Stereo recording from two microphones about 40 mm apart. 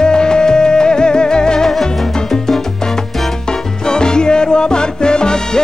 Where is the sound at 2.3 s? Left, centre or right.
Centre.